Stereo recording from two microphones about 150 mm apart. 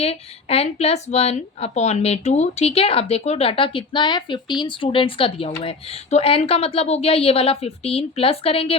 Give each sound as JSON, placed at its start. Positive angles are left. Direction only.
{"t": 0.0, "sound": "a woman's voice", "side_deg": 40}